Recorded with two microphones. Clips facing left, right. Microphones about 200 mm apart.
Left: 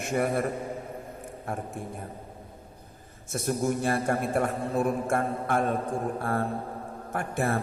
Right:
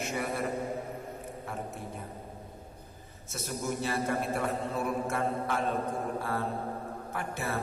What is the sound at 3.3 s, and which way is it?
A man's voice, 50° left (ahead or behind).